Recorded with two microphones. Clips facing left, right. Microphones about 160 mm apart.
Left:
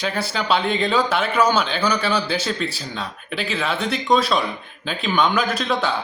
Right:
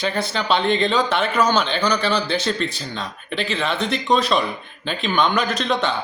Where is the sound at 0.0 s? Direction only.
5° left (ahead or behind).